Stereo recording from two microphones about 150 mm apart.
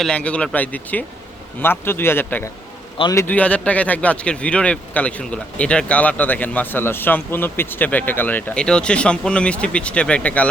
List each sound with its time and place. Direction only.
0.0 s a man's voice: 5° left (ahead or behind); by 3.2 s 25° left (ahead or behind)
3.2 s speech: 10° left (ahead or behind)